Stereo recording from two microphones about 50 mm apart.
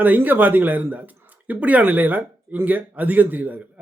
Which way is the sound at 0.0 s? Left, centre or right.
Right.